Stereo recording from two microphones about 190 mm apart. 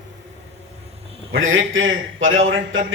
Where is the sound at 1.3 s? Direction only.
90° right.